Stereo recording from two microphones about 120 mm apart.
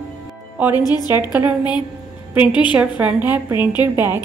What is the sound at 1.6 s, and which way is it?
A woman's voice, 40° left (ahead or behind).